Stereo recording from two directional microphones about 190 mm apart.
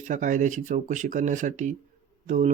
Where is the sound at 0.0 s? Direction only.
40° right (ahead or behind).